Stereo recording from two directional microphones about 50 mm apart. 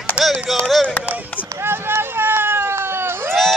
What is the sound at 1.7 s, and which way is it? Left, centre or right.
Run, right.